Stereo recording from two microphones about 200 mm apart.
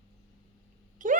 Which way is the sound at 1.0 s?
40° right (ahead or behind).